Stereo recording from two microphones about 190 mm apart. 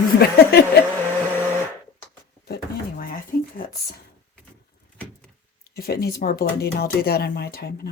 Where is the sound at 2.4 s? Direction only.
55° left (ahead or behind).